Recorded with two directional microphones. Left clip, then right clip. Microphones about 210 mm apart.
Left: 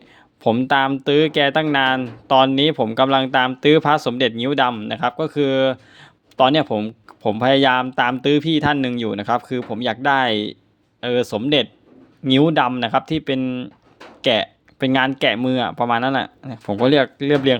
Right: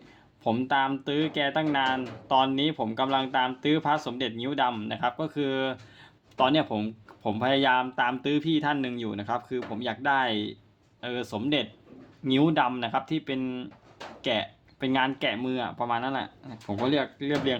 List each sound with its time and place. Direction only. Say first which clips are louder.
0.4 s speech: left 9 dB; 35° left (ahead or behind)